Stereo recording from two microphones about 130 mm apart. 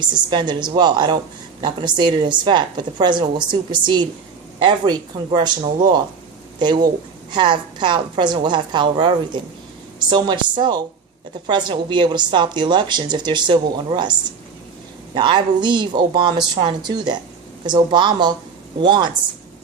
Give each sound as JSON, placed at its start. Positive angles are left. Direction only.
{"t": 0.0, "sound": "a woman's voice", "side_deg": -35}